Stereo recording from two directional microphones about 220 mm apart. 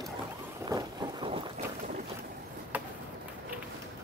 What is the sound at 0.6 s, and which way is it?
Run, 20° right (ahead or behind).